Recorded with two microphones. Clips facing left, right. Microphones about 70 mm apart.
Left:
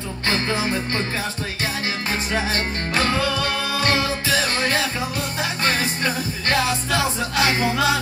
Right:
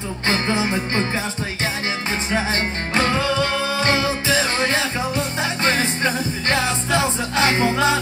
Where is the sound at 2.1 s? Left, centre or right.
Right.